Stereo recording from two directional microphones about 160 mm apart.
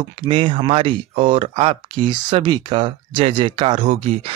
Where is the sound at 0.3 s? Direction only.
30° right (ahead or behind).